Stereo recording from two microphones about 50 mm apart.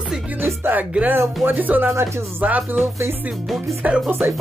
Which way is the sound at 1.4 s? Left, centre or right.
Right.